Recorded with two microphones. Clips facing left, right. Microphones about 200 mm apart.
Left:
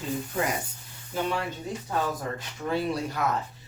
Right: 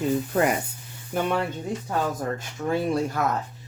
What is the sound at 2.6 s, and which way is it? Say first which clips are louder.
Speech: right 4 dB; 50° right (ahead or behind).